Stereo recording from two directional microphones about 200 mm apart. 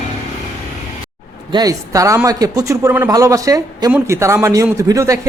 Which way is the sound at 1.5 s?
15° right (ahead or behind).